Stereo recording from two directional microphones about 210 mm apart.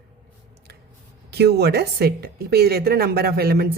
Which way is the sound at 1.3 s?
50° right (ahead or behind).